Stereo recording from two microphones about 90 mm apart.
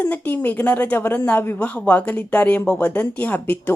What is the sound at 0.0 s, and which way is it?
Speech, 20° left (ahead or behind).